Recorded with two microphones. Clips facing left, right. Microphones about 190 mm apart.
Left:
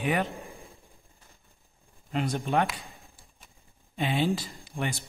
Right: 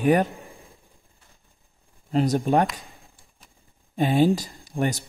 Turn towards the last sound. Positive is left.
turn(degrees=-40)  # may be behind; listen again after turning